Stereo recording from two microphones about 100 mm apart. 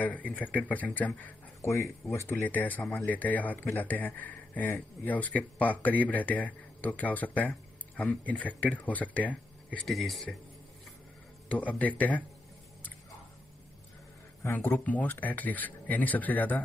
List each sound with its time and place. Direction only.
0.0 s a man's voice: 15° left (ahead or behind)
1.6 s a man's voice: 30° left (ahead or behind); by 9.8 s 15° left (ahead or behind)
9.8 s a man's voice: centre (ahead or behind)
11.4 s a man's voice: 15° left (ahead or behind)
14.4 s a man's voice: 20° left (ahead or behind)